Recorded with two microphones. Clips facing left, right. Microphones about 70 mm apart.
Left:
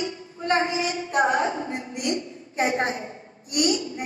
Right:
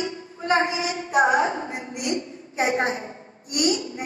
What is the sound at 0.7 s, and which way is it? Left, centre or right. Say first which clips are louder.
A woman's voice: right 2 dB; right.